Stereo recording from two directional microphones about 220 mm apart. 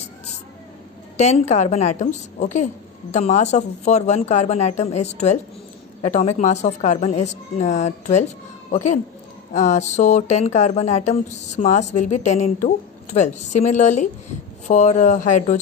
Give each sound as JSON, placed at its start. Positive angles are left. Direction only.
{"t": 1.1, "sound": "speech", "side_deg": 30}
{"t": 9.5, "sound": "speech", "side_deg": 35}